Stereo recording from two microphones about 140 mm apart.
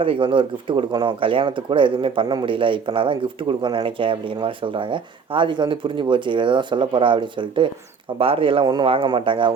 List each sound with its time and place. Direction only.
0.0 s speech: 40° right (ahead or behind)